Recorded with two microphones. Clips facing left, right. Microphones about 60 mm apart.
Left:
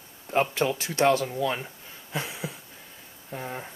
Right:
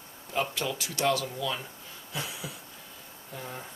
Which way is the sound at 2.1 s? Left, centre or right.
Left.